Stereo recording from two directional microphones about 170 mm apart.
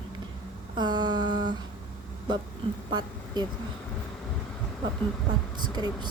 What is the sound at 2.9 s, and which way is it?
Speech, 25° right (ahead or behind).